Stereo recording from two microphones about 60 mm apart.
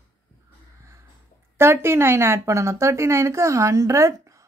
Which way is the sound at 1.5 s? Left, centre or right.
Right.